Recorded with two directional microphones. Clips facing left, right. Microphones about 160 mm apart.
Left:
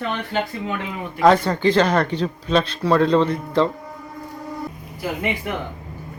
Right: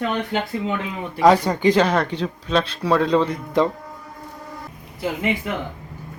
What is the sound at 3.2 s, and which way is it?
Speech, 15° right (ahead or behind).